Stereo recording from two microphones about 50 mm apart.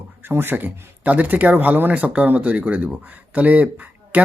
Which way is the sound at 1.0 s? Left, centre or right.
Right.